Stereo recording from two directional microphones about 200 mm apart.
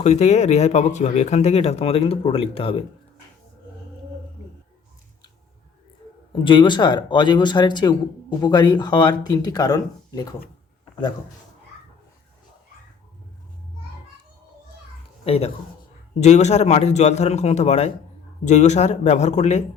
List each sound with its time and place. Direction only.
0.0 s speech: 35° left (ahead or behind)
6.3 s speech: 25° left (ahead or behind)
15.2 s speech: 30° left (ahead or behind)